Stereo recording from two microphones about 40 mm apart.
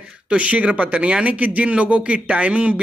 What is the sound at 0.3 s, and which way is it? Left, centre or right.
Speech, right.